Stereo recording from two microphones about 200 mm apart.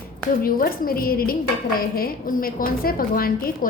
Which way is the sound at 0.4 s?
45° left (ahead or behind).